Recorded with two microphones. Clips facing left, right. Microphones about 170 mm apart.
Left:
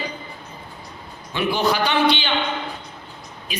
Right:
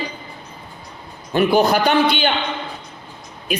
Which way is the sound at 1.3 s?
45° right (ahead or behind).